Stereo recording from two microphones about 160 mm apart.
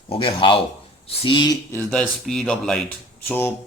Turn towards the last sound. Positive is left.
turn(degrees=15)  # may be behind; listen again after turning